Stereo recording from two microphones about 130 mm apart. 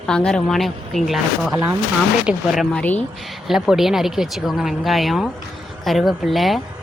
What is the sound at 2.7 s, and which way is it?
Speech, 10° left (ahead or behind).